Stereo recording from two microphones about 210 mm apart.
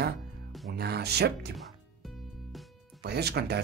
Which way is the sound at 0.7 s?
50° right (ahead or behind).